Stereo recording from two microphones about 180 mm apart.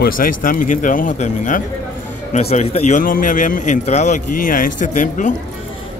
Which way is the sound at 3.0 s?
50° left (ahead or behind).